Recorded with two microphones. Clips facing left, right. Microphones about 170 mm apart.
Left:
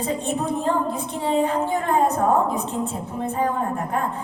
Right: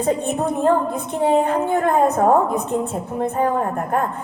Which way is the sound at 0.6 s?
55° right (ahead or behind).